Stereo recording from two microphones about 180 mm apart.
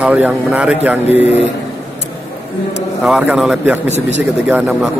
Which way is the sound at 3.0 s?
5° right (ahead or behind).